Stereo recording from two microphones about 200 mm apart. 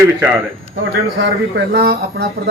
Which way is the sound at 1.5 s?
55° right (ahead or behind).